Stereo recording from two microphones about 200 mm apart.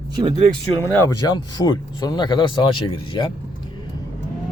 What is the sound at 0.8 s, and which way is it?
Speech, 10° left (ahead or behind).